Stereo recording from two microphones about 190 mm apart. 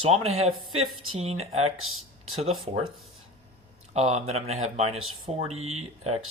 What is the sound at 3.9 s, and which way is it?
Speech, 35° right (ahead or behind).